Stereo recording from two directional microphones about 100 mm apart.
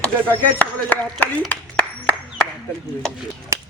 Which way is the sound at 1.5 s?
15° left (ahead or behind).